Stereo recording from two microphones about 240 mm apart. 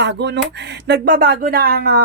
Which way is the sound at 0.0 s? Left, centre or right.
Right.